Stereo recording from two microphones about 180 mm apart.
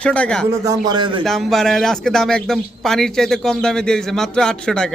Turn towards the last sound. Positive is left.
turn(degrees=5)  # may be behind; listen again after turning